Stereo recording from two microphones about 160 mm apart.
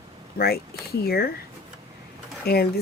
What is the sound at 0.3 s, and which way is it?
Speech, 75° left (ahead or behind).